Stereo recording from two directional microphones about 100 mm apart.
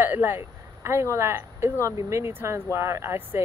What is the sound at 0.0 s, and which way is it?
Speech, 20° right (ahead or behind).